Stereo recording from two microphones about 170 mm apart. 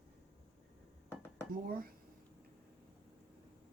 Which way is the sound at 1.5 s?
60° right (ahead or behind).